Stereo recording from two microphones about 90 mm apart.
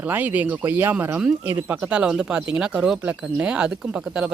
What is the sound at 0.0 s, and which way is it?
Speech, 20° right (ahead or behind).